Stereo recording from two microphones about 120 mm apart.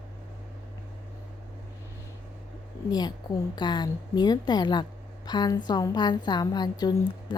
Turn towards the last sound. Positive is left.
turn(degrees=35)  # may be behind; listen again after turning